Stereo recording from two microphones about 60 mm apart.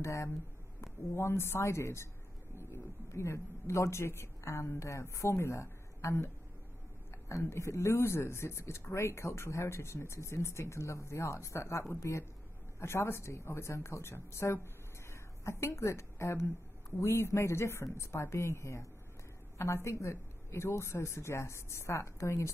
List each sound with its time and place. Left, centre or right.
0.0 s a man's voice: left
7.2 s a man's voice: left